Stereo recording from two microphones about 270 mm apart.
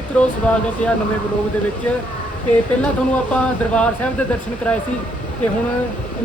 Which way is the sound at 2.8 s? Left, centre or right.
Centre.